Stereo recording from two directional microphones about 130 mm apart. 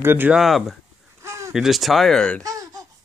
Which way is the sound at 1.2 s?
20° right (ahead or behind).